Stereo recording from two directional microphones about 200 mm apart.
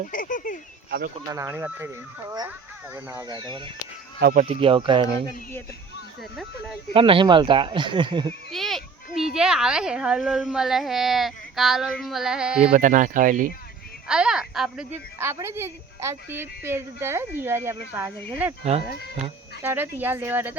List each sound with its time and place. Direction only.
0.1 s speech: 40° left (ahead or behind)
0.9 s speech: 50° right (ahead or behind)
1.3 s a woman's voice: 10° right (ahead or behind)
2.9 s speech: 10° right (ahead or behind)
4.2 s speech: 45° right (ahead or behind)
4.4 s speech: 25° right (ahead or behind)
6.3 s a child's voice: centre (ahead or behind)
6.9 s speech: 25° right (ahead or behind)
8.5 s a child's voice: centre (ahead or behind)
12.7 s speech: 40° right (ahead or behind)
14.1 s a woman's voice: 5° right (ahead or behind)
19.6 s a woman's voice: 10° right (ahead or behind)